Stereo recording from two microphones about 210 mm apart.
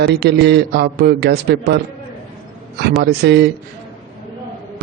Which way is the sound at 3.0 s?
50° right (ahead or behind).